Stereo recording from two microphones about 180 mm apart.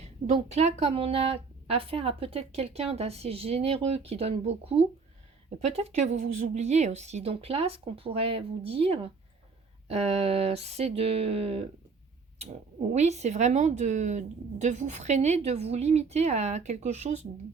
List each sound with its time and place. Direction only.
0.0 s a woman's voice: 40° right (ahead or behind)